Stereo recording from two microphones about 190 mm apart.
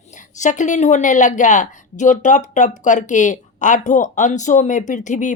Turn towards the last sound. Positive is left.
turn(degrees=40)  # may be behind; listen again after turning